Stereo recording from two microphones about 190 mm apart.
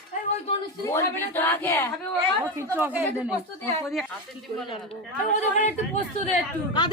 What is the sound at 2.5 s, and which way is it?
Speech, 10° right (ahead or behind).